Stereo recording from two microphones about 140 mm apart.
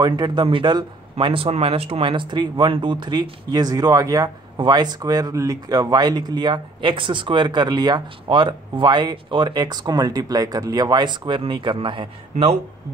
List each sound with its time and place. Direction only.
0.0 s speech: 35° right (ahead or behind)